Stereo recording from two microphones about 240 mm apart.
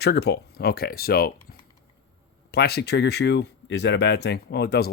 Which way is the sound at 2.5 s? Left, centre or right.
Left.